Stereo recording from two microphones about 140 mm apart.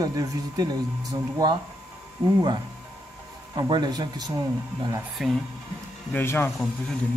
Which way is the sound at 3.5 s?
30° right (ahead or behind).